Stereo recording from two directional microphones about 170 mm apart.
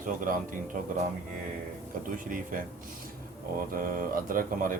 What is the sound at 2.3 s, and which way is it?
Speech, 55° right (ahead or behind).